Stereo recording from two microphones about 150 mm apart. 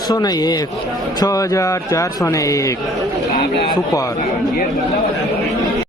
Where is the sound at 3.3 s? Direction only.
90° left.